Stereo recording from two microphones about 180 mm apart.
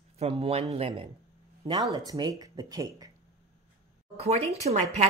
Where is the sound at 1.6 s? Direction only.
20° right (ahead or behind).